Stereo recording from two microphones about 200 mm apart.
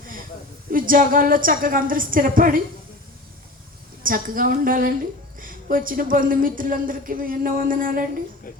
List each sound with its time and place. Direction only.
0.7 s speech: 45° right (ahead or behind)
4.0 s speech: 45° right (ahead or behind)